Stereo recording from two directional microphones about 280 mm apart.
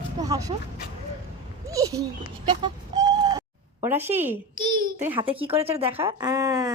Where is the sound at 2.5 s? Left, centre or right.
Centre.